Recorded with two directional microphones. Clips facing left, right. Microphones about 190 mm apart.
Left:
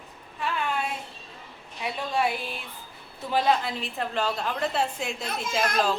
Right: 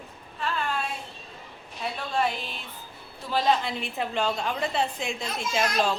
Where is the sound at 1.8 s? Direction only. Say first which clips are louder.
Left 1 dB; 10° left (ahead or behind).